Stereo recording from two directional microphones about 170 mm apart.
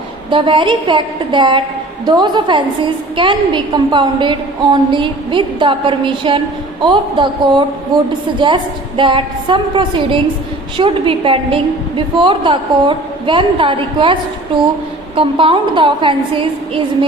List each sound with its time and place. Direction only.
0.3 s a woman's voice: 30° right (ahead or behind)